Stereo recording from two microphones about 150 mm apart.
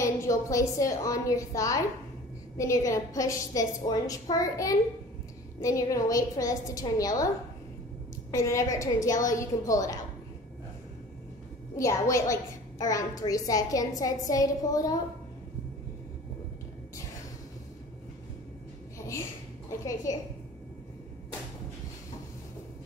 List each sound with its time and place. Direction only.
0.0 s a woman's voice: 20° left (ahead or behind)
8.3 s a woman's voice: 20° left (ahead or behind)
11.7 s a woman's voice: 20° left (ahead or behind)
19.8 s a woman's voice: 20° left (ahead or behind)